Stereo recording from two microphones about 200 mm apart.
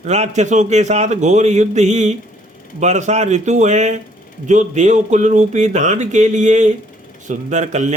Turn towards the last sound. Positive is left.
turn(degrees=-35)  # may be behind; listen again after turning